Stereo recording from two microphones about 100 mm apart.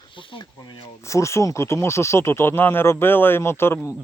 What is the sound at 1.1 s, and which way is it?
Speech, 30° left (ahead or behind).